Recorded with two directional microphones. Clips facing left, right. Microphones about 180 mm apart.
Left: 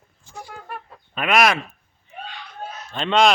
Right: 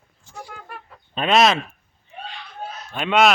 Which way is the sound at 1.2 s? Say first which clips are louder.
Right 2 dB; 25° right (ahead or behind).